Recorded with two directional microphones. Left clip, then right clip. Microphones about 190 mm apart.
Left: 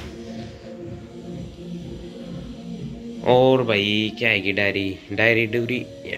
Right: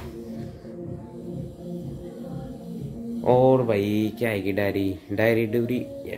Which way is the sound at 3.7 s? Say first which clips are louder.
Left 4 dB; 20° right (ahead or behind).